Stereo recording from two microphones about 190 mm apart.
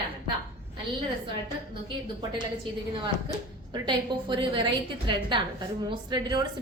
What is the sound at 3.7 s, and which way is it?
A woman's voice, 25° right (ahead or behind).